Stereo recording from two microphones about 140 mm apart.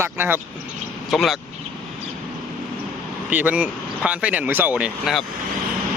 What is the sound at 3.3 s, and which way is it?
Speech, 10° right (ahead or behind).